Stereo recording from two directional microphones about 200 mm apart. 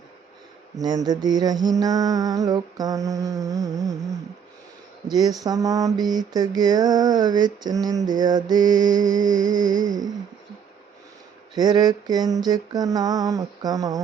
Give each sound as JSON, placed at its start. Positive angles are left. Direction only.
{"t": 0.8, "sound": "mantra", "side_deg": -20}
{"t": 5.0, "sound": "mantra", "side_deg": -20}
{"t": 11.5, "sound": "mantra", "side_deg": -20}